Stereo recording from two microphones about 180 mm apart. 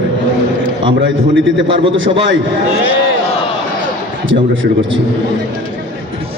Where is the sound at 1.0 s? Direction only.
90° right.